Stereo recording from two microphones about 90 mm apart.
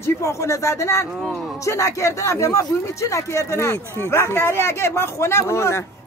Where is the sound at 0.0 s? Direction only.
35° left (ahead or behind).